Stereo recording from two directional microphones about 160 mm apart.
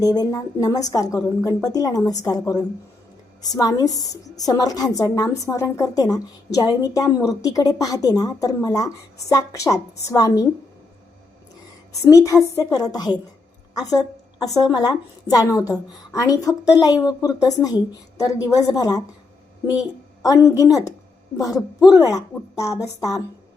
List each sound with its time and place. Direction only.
0.0 s a woman's voice: 25° left (ahead or behind)
12.0 s a woman's voice: 20° left (ahead or behind)
21.8 s a woman's voice: 20° left (ahead or behind)